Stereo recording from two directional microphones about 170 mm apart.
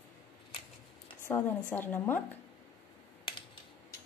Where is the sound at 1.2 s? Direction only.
15° left (ahead or behind).